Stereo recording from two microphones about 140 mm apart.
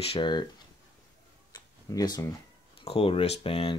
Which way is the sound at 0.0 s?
40° left (ahead or behind).